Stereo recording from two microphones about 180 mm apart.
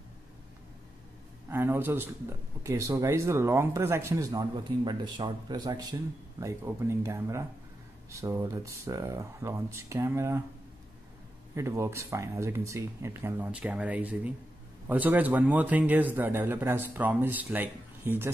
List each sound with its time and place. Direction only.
1.5 s speech: 10° right (ahead or behind)
11.5 s speech: 15° right (ahead or behind)